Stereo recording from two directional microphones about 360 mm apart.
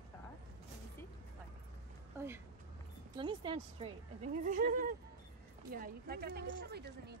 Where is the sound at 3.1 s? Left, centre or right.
Centre.